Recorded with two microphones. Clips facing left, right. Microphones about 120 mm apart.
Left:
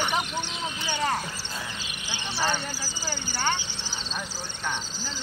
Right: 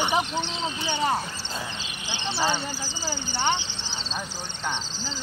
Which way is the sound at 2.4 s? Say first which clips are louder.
Right 1 dB; 15° right (ahead or behind).